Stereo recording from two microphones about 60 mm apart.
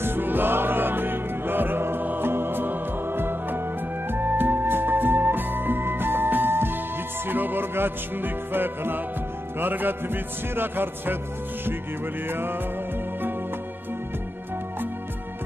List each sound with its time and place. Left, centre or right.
0.0 s music: right
12.3 s music: right